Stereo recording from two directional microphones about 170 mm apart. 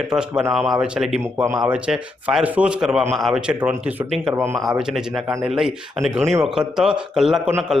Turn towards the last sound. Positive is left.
turn(degrees=0)  # may be behind; listen again after turning